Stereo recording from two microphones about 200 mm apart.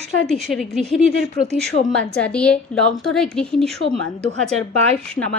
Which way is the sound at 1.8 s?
45° left (ahead or behind).